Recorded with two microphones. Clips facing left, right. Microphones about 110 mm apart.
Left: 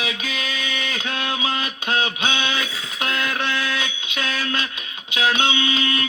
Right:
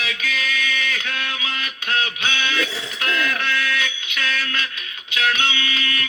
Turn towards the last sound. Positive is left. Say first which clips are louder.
# left 4 dB
turn(degrees=25)  # may be behind; listen again after turning